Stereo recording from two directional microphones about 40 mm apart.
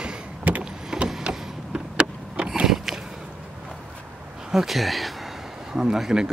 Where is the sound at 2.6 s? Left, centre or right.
Centre.